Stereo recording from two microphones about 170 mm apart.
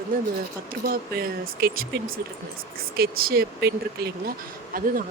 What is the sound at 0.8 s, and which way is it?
Speech, 65° right (ahead or behind).